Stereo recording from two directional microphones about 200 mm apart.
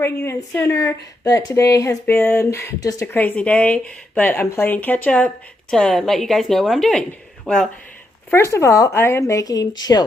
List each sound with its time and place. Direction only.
0.0 s a woman's voice: 10° left (ahead or behind)